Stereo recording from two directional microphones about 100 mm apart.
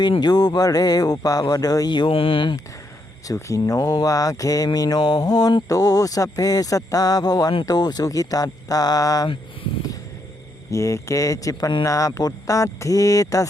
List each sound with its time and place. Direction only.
0.0 s mantra: 45° left (ahead or behind)
3.3 s mantra: 30° left (ahead or behind)
10.7 s mantra: 30° left (ahead or behind)